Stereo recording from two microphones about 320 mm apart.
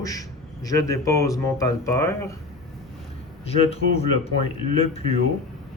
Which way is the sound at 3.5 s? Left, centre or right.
Centre.